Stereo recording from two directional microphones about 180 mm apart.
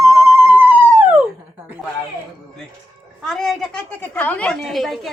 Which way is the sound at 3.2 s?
Centre (ahead or behind).